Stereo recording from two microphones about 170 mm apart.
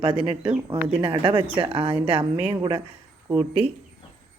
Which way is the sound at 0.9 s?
35° right (ahead or behind).